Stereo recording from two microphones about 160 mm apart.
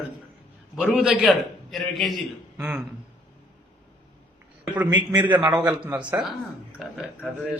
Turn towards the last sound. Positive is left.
turn(degrees=-5)  # may be behind; listen again after turning